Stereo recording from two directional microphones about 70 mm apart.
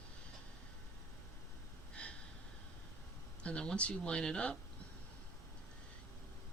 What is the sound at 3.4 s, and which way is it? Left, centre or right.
Speech, centre.